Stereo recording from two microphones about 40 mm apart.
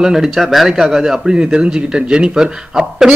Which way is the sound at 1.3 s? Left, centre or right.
Right.